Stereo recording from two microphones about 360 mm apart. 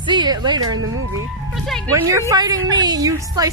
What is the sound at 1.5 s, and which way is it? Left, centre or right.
A woman's voice, centre.